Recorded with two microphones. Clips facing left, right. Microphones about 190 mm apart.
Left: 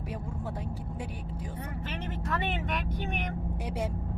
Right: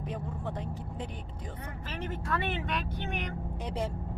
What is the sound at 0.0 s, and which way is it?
A woman's voice, 5° left (ahead or behind).